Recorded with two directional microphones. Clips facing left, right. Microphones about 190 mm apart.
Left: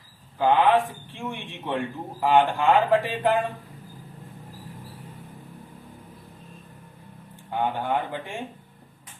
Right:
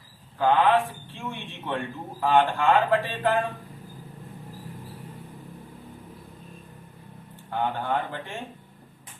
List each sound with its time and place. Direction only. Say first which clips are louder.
0.3 s a man's voice: left 1 dB; 15° left (ahead or behind)
7.5 s a man's voice: left 1 dB; 15° left (ahead or behind)